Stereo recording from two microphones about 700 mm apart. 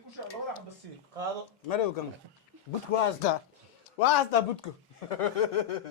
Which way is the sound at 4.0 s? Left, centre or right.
Left.